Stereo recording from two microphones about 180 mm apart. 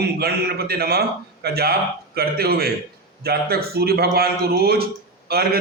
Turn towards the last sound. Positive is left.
turn(degrees=-60)  # may be behind; listen again after turning